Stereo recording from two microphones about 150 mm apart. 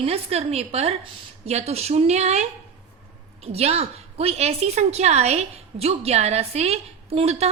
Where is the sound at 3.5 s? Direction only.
45° right (ahead or behind).